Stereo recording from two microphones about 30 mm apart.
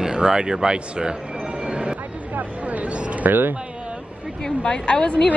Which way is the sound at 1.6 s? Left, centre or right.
Right.